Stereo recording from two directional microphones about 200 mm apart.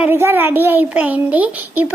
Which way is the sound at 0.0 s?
10° right (ahead or behind).